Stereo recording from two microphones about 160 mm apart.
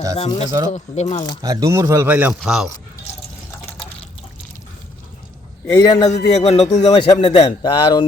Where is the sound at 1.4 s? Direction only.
20° right (ahead or behind); by 2.6 s centre (ahead or behind).